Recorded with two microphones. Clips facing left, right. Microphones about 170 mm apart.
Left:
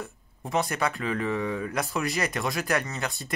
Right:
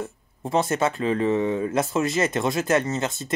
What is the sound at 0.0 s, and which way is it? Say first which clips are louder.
Speech: right 6 dB; 30° right (ahead or behind).